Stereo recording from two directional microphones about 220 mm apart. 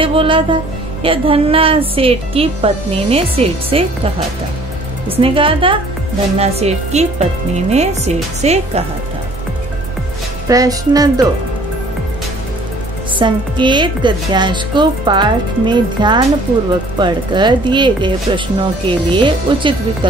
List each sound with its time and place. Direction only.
0.0 s a woman's voice: 25° right (ahead or behind)
10.5 s music: 15° right (ahead or behind)
13.2 s a woman's voice: 20° right (ahead or behind)